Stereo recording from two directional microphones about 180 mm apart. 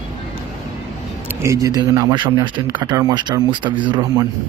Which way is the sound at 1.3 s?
15° right (ahead or behind).